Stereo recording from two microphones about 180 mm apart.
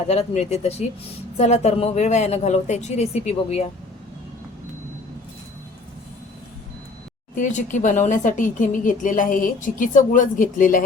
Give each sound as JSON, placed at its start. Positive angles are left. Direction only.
{"t": 0.1, "sound": "speech", "side_deg": 35}
{"t": 7.3, "sound": "speech", "side_deg": 45}